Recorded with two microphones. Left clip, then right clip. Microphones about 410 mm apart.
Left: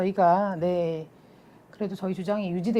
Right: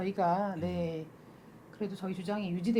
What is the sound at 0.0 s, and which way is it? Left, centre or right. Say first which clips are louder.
Speech: left 9 dB; left.